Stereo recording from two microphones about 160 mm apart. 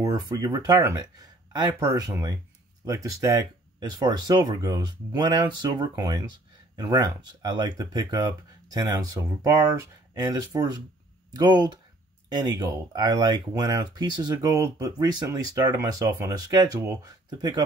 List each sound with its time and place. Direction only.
0.0 s speech: 25° right (ahead or behind)